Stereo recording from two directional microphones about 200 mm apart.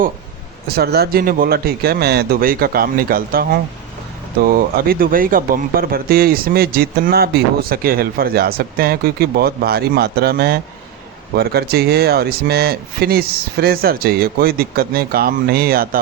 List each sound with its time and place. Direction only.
0.8 s speech: 55° right (ahead or behind)